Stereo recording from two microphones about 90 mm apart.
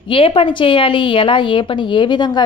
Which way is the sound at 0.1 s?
90° left.